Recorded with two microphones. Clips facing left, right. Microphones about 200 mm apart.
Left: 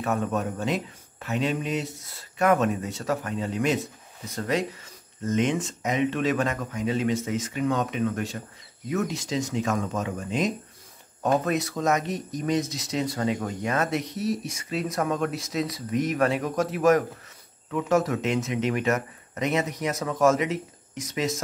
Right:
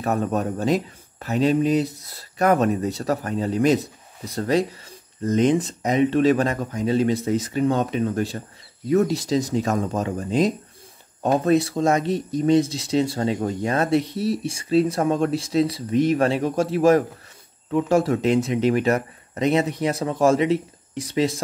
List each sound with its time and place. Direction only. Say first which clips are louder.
0.0 s speech: right 4 dB; 35° right (ahead or behind)